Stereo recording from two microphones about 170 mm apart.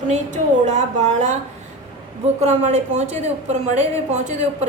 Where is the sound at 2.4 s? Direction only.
40° right (ahead or behind).